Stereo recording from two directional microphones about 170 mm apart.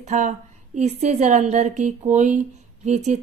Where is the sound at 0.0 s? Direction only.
45° right (ahead or behind).